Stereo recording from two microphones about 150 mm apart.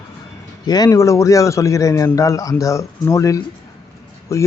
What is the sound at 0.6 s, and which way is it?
A man's voice, 25° left (ahead or behind).